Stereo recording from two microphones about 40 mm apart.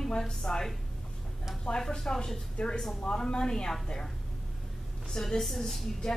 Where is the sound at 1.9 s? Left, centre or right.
Centre.